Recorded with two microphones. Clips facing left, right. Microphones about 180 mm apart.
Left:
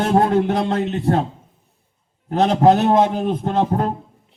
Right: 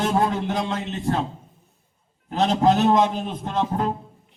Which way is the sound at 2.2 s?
55° left (ahead or behind).